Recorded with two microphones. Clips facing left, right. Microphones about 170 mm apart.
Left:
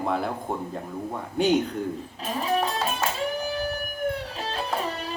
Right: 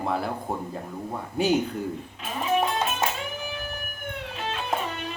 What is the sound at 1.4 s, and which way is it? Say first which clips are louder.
Speech: left 1 dB; 5° right (ahead or behind).